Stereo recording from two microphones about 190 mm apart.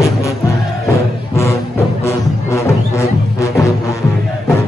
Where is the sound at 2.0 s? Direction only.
15° left (ahead or behind).